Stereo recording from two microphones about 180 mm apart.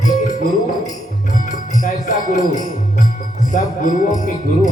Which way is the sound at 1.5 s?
45° left (ahead or behind).